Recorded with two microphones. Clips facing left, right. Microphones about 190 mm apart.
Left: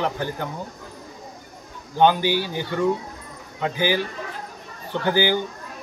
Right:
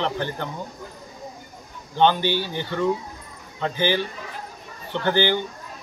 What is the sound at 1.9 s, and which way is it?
Speech, 10° left (ahead or behind).